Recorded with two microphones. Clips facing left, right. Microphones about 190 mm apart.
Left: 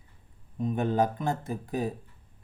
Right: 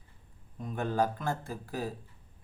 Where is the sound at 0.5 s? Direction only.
20° left (ahead or behind).